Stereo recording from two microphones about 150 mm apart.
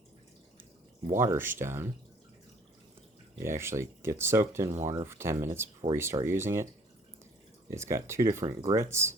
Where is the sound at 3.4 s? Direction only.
15° right (ahead or behind).